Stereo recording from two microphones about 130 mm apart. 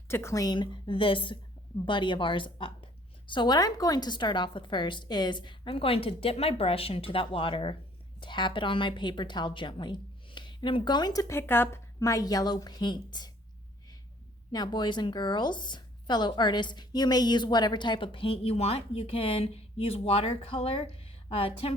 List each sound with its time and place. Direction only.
0.1 s a woman's voice: 20° left (ahead or behind)
14.5 s a woman's voice: 35° left (ahead or behind)